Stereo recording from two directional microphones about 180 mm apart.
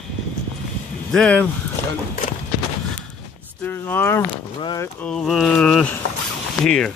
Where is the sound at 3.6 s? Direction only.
10° left (ahead or behind).